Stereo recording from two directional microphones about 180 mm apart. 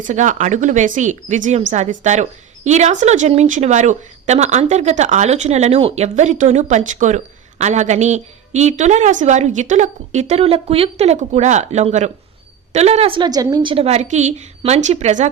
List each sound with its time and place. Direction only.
0.0 s speech: 45° right (ahead or behind)